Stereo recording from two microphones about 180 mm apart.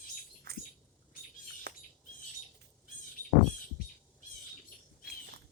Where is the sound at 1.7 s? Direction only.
60° right (ahead or behind).